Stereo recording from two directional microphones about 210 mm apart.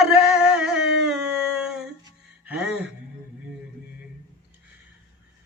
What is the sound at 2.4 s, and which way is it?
Music, 5° right (ahead or behind).